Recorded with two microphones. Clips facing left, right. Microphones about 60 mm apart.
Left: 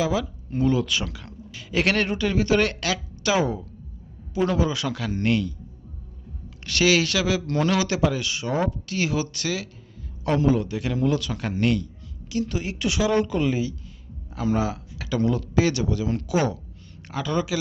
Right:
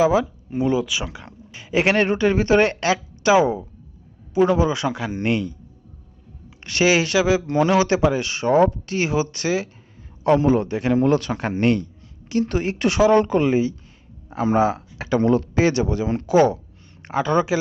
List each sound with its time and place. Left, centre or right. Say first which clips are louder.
0.0 s a man's voice: right 7 dB; right
0.5 s speech: right 1 dB; centre
1.1 s speech: right 1 dB; right
6.7 s a man's voice: right 2 dB; right
12.3 s a man's voice: right 6 dB; right